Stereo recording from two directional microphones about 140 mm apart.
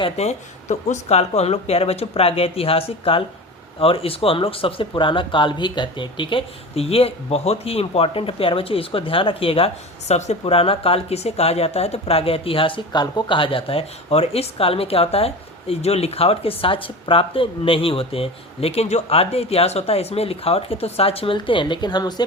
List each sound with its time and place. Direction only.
0.0 s speech: 50° left (ahead or behind); by 22.1 s 30° left (ahead or behind)